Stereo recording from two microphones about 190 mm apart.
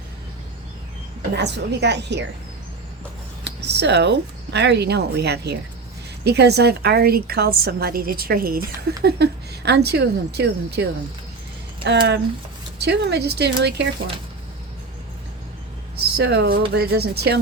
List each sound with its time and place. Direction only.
1.4 s a woman's voice: 65° right (ahead or behind)
3.4 s a woman's voice: 65° right (ahead or behind)
16.1 s a woman's voice: 60° right (ahead or behind)